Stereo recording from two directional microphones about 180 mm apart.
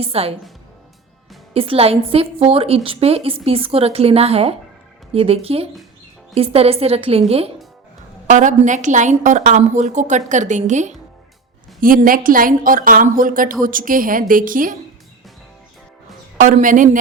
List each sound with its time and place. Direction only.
0.0 s a woman's voice: 35° right (ahead or behind)
1.5 s a woman's voice: 30° right (ahead or behind); by 14.8 s 50° right (ahead or behind)
16.4 s a woman's voice: 45° right (ahead or behind)